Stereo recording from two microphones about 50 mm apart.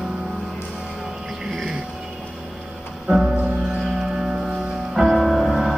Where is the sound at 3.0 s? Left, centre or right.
Centre.